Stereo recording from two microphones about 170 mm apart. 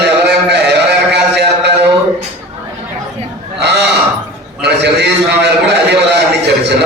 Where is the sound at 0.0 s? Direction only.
75° right (ahead or behind).